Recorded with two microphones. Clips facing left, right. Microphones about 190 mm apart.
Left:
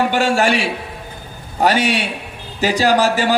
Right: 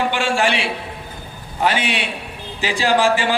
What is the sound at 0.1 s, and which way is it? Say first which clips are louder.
A man's voice: left 4 dB; 40° left (ahead or behind).